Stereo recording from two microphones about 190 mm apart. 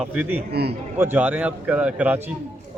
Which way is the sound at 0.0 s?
5° right (ahead or behind).